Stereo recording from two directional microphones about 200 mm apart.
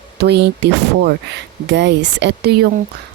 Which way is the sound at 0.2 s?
55° right (ahead or behind).